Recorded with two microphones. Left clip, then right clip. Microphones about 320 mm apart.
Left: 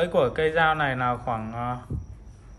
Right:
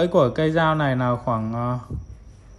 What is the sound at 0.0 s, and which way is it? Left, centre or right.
Speech, centre.